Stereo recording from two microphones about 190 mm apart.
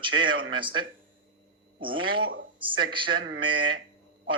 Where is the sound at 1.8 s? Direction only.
25° right (ahead or behind).